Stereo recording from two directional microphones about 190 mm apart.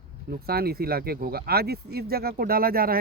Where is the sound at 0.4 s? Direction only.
55° right (ahead or behind).